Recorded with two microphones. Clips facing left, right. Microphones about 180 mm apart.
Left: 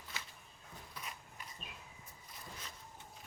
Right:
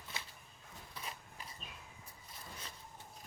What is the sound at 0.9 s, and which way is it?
Cough, 30° right (ahead or behind).